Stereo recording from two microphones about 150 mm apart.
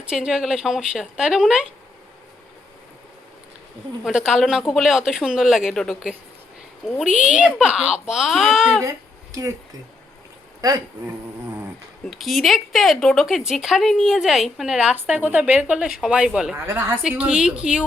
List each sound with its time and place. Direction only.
0.0 s a woman's voice: 5° right (ahead or behind)
4.0 s a woman's voice: 5° right (ahead or behind)
7.2 s a woman's voice: 5° right (ahead or behind)
8.8 s a sound: 20° right (ahead or behind)
10.6 s speech: 25° right (ahead or behind)
12.1 s a woman's voice: centre (ahead or behind)
16.6 s a woman's voice: 15° right (ahead or behind)
17.0 s a woman's voice: 5° right (ahead or behind)